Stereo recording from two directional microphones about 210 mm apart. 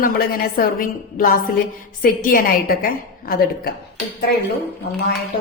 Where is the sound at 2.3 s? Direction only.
45° left (ahead or behind).